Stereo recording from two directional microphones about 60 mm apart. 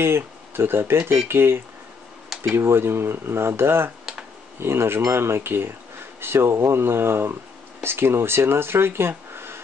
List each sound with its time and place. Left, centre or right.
0.0 s speech: right